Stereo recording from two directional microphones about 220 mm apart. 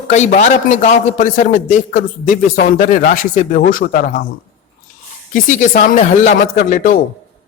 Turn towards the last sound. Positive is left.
turn(degrees=35)  # may be behind; listen again after turning